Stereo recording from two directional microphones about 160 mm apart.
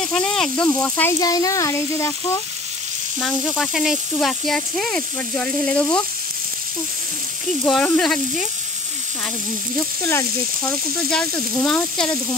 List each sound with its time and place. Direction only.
0.0 s speech: 5° left (ahead or behind)
1.2 s speech: 20° left (ahead or behind)
3.2 s speech: 5° left (ahead or behind)
7.6 s speech: 10° left (ahead or behind)
10.0 s speech: 10° left (ahead or behind)